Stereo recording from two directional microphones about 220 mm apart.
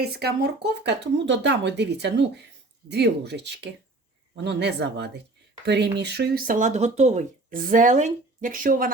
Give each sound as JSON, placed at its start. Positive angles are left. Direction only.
{"t": 0.0, "sound": "speech", "side_deg": -45}